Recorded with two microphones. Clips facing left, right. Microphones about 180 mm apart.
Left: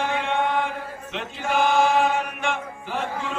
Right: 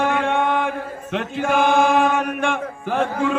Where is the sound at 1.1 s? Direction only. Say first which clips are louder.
Right 6 dB; 50° right (ahead or behind).